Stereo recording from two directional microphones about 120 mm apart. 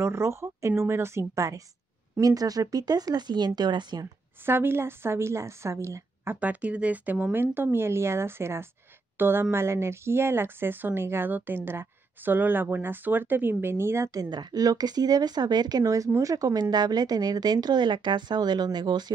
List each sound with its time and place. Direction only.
0.0 s a woman's voice: 20° right (ahead or behind)
4.5 s speech: 20° right (ahead or behind)
6.4 s speech: 10° right (ahead or behind)
14.3 s a woman's voice: 35° right (ahead or behind)